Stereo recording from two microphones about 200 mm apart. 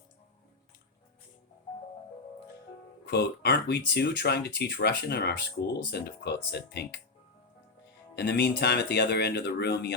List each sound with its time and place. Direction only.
3.1 s speech: 55° left (ahead or behind)
8.1 s speech: 55° left (ahead or behind)